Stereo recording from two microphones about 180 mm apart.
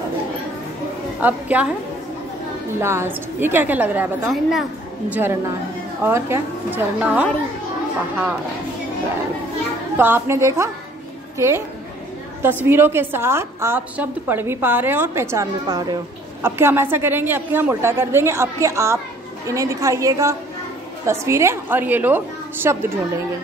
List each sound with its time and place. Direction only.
1.2 s a woman's voice: 10° right (ahead or behind)
2.8 s a woman's voice: 15° right (ahead or behind)
5.1 s a woman's voice: 10° right (ahead or behind)
9.9 s a woman's voice: 10° right (ahead or behind)